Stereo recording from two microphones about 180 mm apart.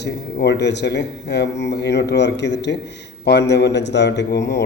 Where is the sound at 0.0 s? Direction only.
70° left (ahead or behind).